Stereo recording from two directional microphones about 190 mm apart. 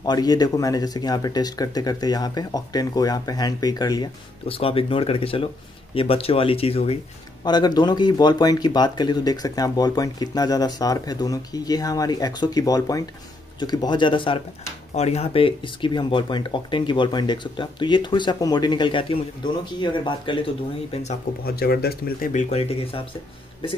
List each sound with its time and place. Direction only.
0.0 s speech: 20° left (ahead or behind)
21.5 s speech: 55° left (ahead or behind); by 23.0 s 30° left (ahead or behind)